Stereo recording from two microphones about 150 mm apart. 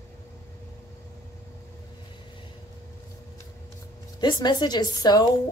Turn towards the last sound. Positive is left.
turn(degrees=25)  # may be behind; listen again after turning